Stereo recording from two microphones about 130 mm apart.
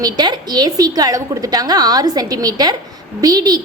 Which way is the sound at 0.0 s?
30° right (ahead or behind).